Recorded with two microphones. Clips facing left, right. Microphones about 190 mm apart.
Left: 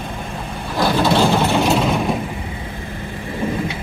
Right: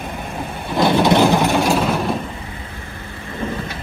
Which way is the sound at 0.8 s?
20° right (ahead or behind).